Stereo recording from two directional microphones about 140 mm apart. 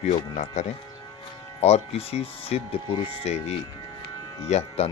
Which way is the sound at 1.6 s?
50° left (ahead or behind).